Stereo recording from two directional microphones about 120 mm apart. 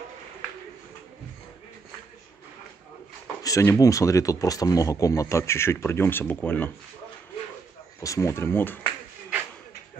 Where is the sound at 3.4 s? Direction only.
25° left (ahead or behind).